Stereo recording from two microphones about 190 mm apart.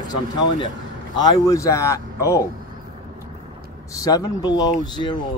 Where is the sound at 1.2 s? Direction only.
15° left (ahead or behind).